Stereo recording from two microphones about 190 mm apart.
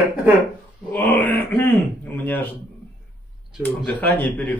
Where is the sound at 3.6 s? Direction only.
10° left (ahead or behind).